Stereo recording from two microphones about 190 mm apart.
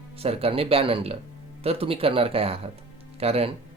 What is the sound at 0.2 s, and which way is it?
Speech, 30° right (ahead or behind).